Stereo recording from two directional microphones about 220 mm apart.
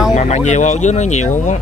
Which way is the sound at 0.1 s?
30° left (ahead or behind).